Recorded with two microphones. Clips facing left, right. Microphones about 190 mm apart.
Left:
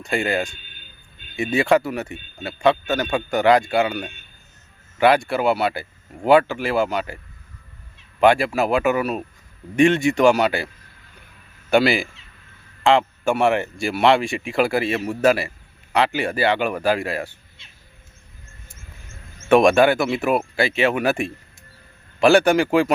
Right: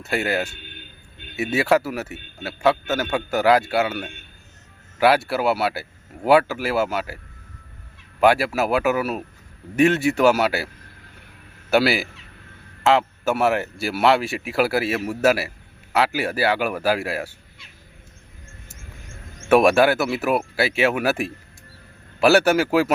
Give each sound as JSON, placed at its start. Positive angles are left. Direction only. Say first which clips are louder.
{"t": 0.0, "sound": "speech", "louder": "left 1 dB", "side_deg": -5}
{"t": 0.5, "sound": "a sound", "louder": "right 6 dB", "side_deg": -65}
{"t": 1.4, "sound": "speech", "louder": "left 1 dB", "side_deg": -5}
{"t": 8.2, "sound": "speech", "louder": "left 1 dB", "side_deg": -5}
{"t": 11.7, "sound": "speech", "louder": "left 1 dB", "side_deg": -5}
{"t": 17.6, "sound": "crow", "louder": "right 3 dB", "side_deg": 25}
{"t": 19.5, "sound": "speech", "louder": "left 1 dB", "side_deg": -5}